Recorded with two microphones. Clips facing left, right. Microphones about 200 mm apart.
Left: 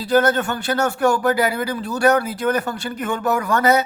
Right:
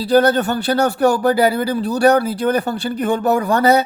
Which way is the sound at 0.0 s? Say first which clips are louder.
Right 3 dB; 35° right (ahead or behind).